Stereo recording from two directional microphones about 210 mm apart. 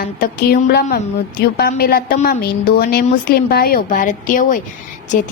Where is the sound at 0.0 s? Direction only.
45° left (ahead or behind).